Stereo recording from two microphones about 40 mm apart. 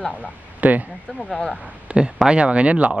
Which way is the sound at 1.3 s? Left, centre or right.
Left.